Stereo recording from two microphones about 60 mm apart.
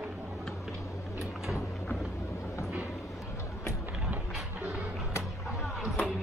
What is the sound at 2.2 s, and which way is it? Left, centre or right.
Vehicle, left.